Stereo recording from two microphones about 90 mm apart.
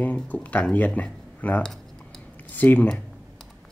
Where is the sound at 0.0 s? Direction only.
15° left (ahead or behind).